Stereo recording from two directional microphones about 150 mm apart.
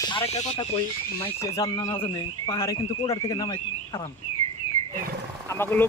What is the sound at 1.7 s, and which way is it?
Speech, 30° left (ahead or behind).